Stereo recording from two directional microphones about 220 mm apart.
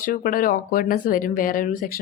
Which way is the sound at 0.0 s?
40° left (ahead or behind).